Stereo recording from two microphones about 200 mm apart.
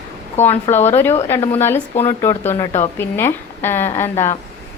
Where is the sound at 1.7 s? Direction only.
30° left (ahead or behind).